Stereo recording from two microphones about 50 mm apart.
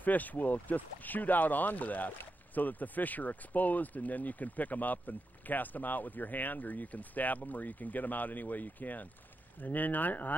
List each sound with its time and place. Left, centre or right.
0.0 s speech: left